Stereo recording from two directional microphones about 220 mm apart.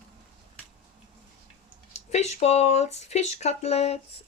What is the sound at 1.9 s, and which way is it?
Speech, 30° left (ahead or behind).